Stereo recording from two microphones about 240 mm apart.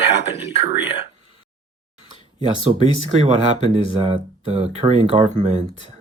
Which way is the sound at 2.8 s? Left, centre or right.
Right.